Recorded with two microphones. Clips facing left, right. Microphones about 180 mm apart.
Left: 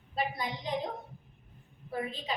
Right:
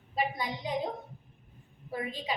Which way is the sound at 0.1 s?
10° right (ahead or behind).